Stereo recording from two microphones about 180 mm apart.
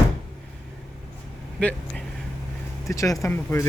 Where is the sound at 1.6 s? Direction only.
10° left (ahead or behind).